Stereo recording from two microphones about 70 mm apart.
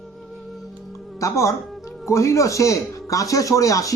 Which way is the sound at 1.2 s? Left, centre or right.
Left.